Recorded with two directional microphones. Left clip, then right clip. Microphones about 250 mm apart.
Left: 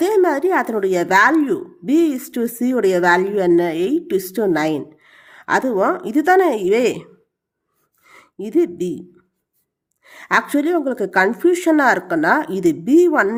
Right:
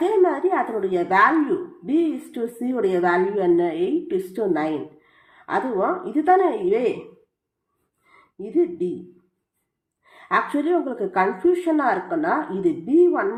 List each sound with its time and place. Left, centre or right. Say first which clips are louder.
0.0 s speech: left 3 dB; left
8.0 s a sound: left 5 dB; left
10.0 s speech: left 4 dB; left